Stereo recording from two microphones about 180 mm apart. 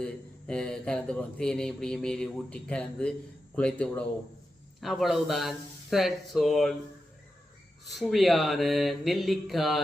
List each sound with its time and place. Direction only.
0.0 s speech: 5° left (ahead or behind)
7.9 s speech: centre (ahead or behind)